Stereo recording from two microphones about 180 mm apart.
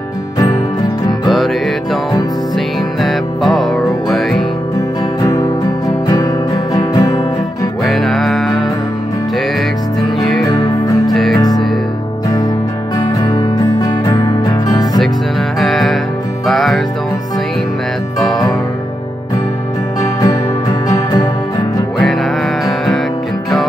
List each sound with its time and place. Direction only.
1.2 s music: centre (ahead or behind)
5.2 s music: 20° left (ahead or behind)
7.8 s music: centre (ahead or behind)
10.1 s music: centre (ahead or behind)
11.3 s music: 20° left (ahead or behind)
12.9 s music: 20° left (ahead or behind)
15.6 s music: centre (ahead or behind)
20.9 s music: 20° left (ahead or behind)
22.0 s music: centre (ahead or behind)